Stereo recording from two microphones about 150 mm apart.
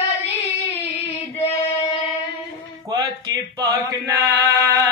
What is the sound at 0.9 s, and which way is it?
Child singing, 40° left (ahead or behind).